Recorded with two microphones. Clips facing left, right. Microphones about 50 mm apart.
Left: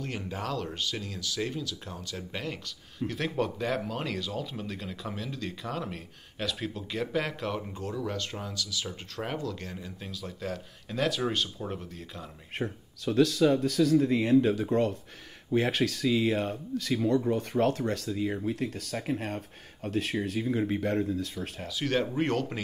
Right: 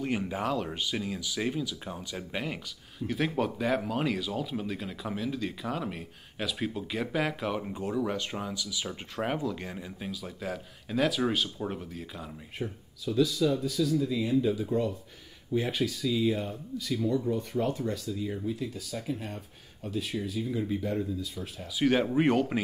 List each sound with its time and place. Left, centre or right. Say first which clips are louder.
0.0 s speech: right 4 dB; centre
12.5 s speech: left 3 dB; left
21.6 s speech: right 4 dB; centre